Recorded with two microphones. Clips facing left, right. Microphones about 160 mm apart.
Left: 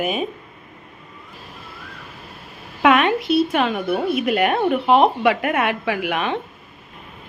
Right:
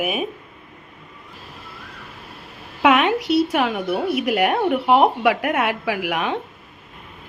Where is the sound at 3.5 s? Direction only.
10° right (ahead or behind).